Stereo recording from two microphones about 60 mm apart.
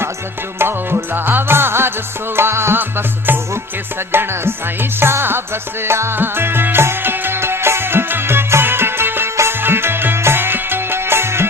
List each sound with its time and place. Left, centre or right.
0.6 s music: right
4.1 s music: right